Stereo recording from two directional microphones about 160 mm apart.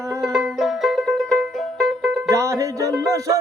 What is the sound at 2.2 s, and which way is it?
Music, 20° right (ahead or behind).